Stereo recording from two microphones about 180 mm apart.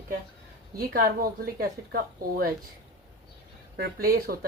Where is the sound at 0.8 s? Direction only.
55° right (ahead or behind).